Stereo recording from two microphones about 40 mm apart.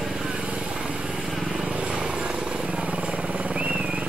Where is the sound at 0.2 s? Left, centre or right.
Right; by 1.6 s centre.